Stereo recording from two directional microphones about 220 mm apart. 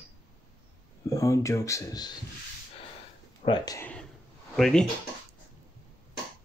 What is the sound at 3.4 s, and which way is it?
Speech, 25° left (ahead or behind).